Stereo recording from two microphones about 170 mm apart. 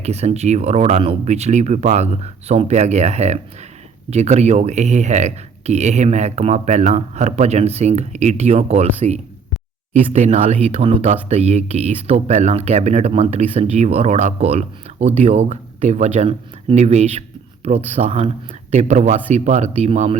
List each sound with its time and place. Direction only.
0.0 s speech: 40° right (ahead or behind)